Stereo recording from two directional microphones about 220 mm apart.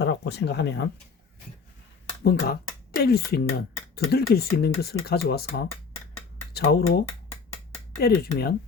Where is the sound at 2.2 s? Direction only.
45° left (ahead or behind).